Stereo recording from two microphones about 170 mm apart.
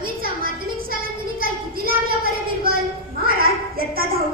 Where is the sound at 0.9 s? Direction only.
60° right (ahead or behind).